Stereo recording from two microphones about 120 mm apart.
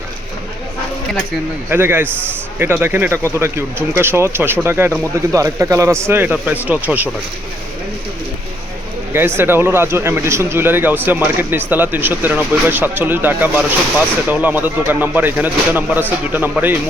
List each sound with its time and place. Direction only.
1.7 s speech: 15° right (ahead or behind)
9.1 s speech: 20° right (ahead or behind)